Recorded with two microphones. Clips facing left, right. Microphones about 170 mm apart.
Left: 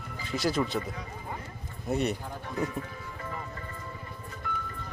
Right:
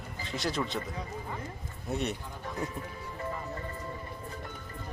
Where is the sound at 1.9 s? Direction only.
Centre (ahead or behind).